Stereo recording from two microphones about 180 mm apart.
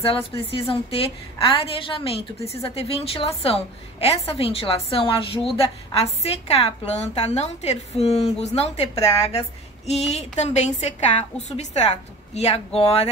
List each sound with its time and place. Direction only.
0.5 s a woman's voice: 30° left (ahead or behind)